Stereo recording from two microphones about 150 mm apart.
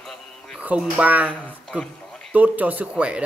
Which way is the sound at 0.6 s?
10° right (ahead or behind).